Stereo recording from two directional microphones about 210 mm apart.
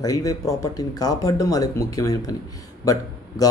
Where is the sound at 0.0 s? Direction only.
15° left (ahead or behind).